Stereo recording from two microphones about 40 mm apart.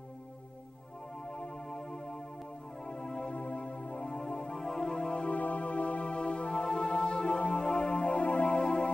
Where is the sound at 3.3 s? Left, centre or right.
Left.